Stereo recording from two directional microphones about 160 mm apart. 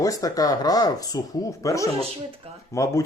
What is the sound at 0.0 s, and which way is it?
Speech, 20° left (ahead or behind).